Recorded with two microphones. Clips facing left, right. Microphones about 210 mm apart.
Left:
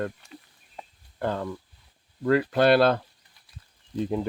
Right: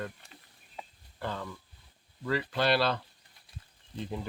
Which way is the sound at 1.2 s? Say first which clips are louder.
Left 8 dB; 50° left (ahead or behind).